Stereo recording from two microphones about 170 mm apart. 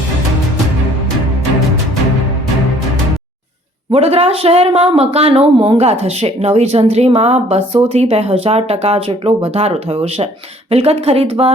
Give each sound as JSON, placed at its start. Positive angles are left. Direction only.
{"t": 3.9, "sound": "speech", "side_deg": -35}